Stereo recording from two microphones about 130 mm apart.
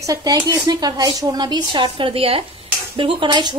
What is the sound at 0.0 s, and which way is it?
A woman's voice, 25° right (ahead or behind).